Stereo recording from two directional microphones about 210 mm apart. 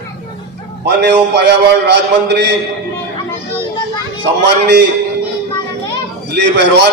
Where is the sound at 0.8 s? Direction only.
55° right (ahead or behind).